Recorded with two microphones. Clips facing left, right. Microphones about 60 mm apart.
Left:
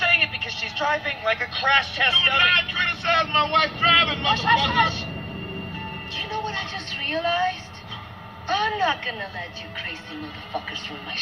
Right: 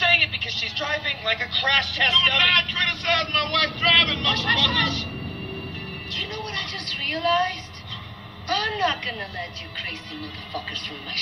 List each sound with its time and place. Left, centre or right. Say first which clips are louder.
0.0 s speech: right 1 dB; left
6.1 s a sound: left 3 dB; left
8.5 s a woman's voice: left 1 dB; centre